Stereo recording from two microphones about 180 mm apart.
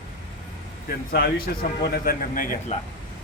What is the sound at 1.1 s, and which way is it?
Speech, 55° left (ahead or behind).